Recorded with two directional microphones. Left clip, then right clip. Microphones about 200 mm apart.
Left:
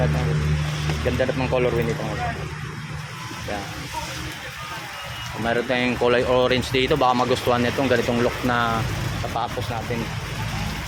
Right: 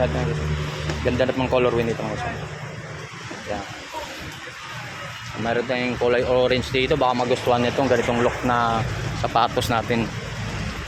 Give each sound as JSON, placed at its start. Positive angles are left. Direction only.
{"t": 1.0, "sound": "speech", "side_deg": -10}
{"t": 5.5, "sound": "speech", "side_deg": 0}
{"t": 9.3, "sound": "speech", "side_deg": -30}